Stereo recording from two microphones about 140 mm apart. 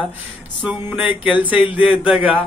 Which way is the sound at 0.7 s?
10° right (ahead or behind).